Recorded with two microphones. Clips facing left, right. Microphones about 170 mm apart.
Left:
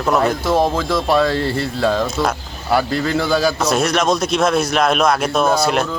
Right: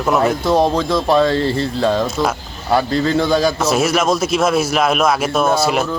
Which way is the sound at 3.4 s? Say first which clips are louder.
Right 1 dB; centre (ahead or behind).